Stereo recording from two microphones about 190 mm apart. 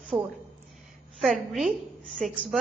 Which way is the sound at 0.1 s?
15° right (ahead or behind).